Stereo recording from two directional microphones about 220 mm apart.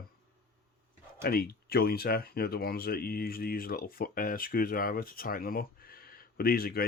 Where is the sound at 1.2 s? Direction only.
45° left (ahead or behind).